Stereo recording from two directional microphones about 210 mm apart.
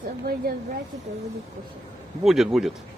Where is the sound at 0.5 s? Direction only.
45° right (ahead or behind).